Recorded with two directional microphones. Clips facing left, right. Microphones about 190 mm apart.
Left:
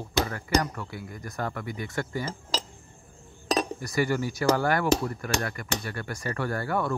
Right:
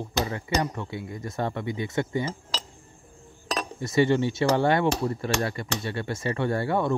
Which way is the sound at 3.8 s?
25° right (ahead or behind).